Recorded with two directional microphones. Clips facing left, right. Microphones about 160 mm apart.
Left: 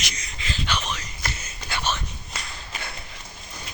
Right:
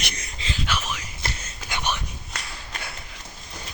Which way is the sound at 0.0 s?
55° right (ahead or behind).